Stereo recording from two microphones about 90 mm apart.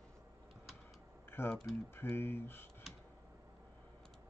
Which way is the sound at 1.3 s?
25° left (ahead or behind).